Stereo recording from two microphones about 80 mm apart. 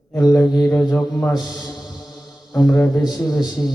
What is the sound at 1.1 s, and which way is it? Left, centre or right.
Speech, centre.